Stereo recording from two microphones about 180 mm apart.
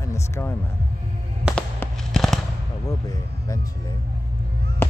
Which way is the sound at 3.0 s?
20° left (ahead or behind).